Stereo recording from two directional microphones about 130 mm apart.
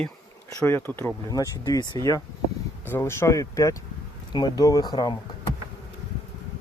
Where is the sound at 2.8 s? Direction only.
15° left (ahead or behind); by 5.1 s 30° left (ahead or behind).